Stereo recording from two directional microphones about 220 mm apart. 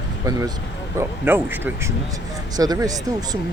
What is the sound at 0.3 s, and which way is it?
Speech, 15° right (ahead or behind).